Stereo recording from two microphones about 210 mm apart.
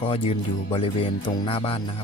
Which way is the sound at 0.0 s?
25° left (ahead or behind).